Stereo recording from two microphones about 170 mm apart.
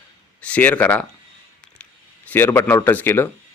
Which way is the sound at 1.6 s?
5° left (ahead or behind).